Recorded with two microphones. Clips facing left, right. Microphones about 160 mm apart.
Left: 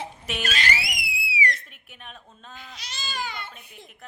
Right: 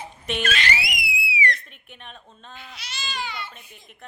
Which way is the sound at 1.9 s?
5° left (ahead or behind).